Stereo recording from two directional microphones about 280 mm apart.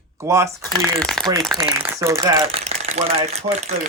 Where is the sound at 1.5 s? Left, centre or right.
Centre.